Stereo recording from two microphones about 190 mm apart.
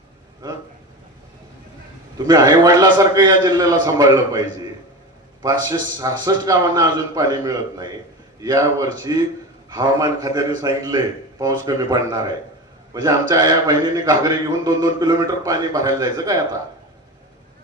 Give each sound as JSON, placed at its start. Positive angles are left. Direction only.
{"t": 2.1, "sound": "a man's voice", "side_deg": -20}
{"t": 5.6, "sound": "a man's voice", "side_deg": -20}